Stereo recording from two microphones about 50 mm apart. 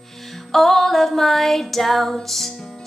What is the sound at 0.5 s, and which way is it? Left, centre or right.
Female singing, centre.